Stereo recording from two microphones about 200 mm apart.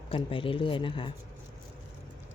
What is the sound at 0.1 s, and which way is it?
Speech, 25° left (ahead or behind).